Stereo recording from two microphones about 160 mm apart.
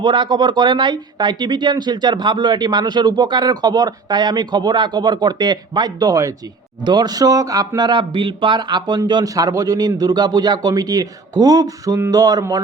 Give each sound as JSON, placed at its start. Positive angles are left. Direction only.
{"t": 0.0, "sound": "speech", "side_deg": -30}